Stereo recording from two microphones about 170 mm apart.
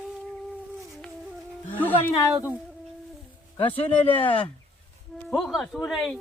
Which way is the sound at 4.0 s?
10° left (ahead or behind).